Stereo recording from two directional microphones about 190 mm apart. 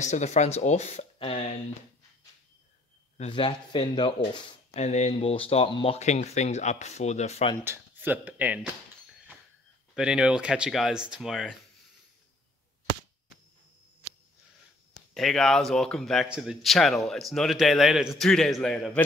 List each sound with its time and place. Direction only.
0.0 s speech: 40° left (ahead or behind)
3.2 s speech: 30° left (ahead or behind)
4.7 s speech: 35° left (ahead or behind)
7.6 s speech: 10° right (ahead or behind)
9.9 s speech: 5° right (ahead or behind)
15.1 s speech: centre (ahead or behind)